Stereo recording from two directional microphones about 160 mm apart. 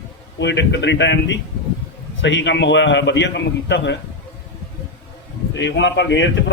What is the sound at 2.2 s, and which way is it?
A man's voice, 90° left.